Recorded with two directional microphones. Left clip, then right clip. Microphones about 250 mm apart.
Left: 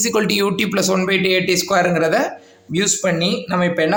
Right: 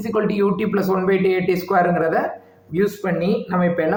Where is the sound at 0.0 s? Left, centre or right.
Left.